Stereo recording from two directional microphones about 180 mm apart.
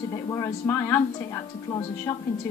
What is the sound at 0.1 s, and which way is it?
A woman's voice, 15° left (ahead or behind).